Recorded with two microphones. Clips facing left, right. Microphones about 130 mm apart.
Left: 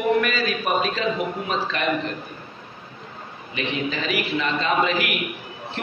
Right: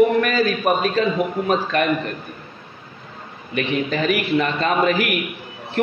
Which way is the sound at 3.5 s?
55° right (ahead or behind).